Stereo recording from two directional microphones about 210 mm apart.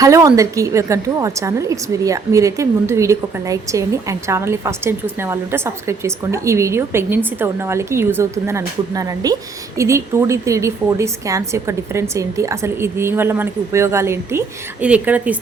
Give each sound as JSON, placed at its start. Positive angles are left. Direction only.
{"t": 0.0, "sound": "a woman's voice", "side_deg": -15}